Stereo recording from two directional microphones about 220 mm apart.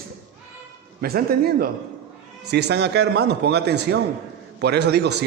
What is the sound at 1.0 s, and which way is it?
A man's voice, 45° right (ahead or behind).